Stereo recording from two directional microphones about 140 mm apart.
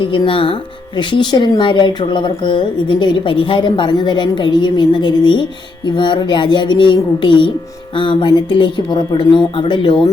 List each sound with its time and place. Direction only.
0.0 s speech: 40° left (ahead or behind)